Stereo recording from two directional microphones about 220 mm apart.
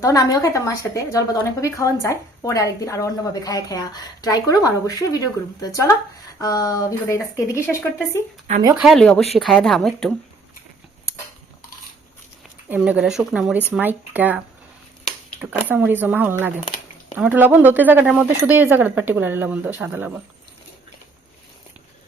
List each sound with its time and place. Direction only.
0.0 s a woman's voice: 15° left (ahead or behind)
6.4 s a woman's voice: 15° left (ahead or behind)
8.7 s a woman's voice: centre (ahead or behind)
12.6 s a woman's voice: 5° right (ahead or behind)